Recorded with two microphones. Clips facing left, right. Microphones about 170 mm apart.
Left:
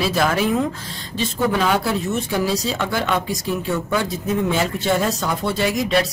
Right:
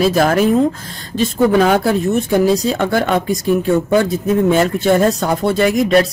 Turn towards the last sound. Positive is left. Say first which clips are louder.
# right 7 dB
turn(degrees=-55)  # may be behind; listen again after turning